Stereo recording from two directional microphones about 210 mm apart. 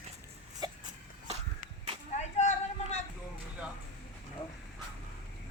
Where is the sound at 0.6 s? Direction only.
20° right (ahead or behind).